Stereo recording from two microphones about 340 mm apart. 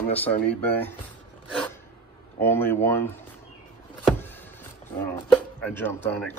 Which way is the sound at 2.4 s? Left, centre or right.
Centre.